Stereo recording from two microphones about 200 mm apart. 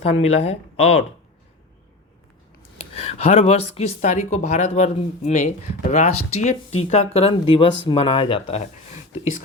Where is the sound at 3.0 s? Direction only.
30° left (ahead or behind).